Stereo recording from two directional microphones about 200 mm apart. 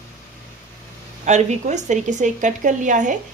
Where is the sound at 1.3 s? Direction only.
35° right (ahead or behind).